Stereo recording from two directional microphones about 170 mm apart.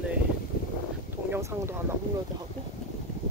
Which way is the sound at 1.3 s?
15° right (ahead or behind).